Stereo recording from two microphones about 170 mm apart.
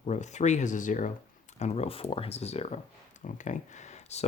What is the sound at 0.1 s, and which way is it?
Speech, 45° left (ahead or behind).